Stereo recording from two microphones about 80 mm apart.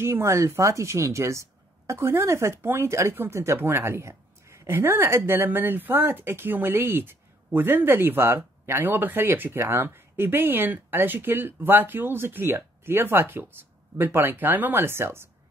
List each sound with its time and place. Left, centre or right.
0.0 s speech: right